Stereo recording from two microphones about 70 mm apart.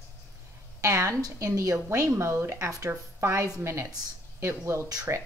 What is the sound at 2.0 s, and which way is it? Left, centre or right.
Speech, right.